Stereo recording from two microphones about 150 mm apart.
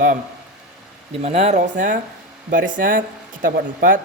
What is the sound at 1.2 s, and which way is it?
Speech, 45° right (ahead or behind).